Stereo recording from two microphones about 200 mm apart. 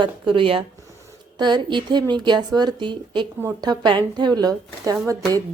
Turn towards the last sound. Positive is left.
turn(degrees=-15)  # may be behind; listen again after turning